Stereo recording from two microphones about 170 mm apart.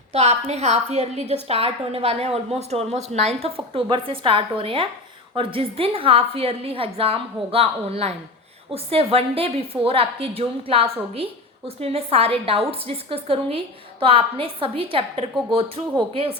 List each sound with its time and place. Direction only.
0.1 s a woman's voice: 40° right (ahead or behind)